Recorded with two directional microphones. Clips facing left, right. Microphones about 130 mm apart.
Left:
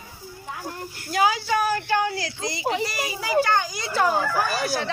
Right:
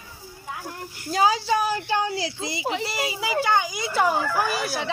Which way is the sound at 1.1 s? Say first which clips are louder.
Right 1 dB; 30° right (ahead or behind).